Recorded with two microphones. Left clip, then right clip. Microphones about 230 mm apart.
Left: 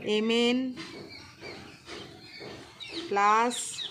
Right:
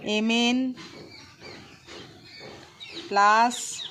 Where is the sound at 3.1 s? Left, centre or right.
Right.